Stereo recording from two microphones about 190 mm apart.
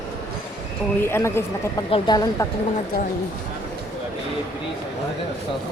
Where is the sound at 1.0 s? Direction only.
10° left (ahead or behind).